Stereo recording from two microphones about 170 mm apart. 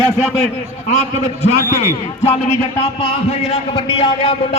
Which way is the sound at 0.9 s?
40° left (ahead or behind).